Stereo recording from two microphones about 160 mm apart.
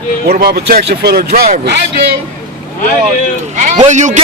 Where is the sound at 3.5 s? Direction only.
50° right (ahead or behind).